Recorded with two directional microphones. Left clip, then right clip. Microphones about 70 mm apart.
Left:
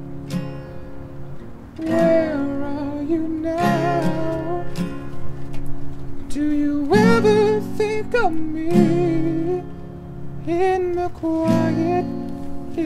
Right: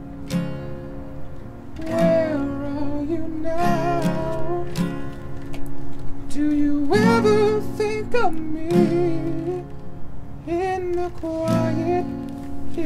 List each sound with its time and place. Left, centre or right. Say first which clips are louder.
2.0 s music: left 2 dB; centre
3.5 s music: left 2 dB; left
4.7 s music: right 1 dB; right
6.3 s music: even; centre
8.7 s music: left 1 dB; left